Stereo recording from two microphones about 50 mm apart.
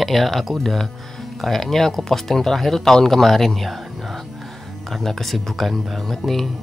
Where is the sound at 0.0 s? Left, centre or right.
Centre.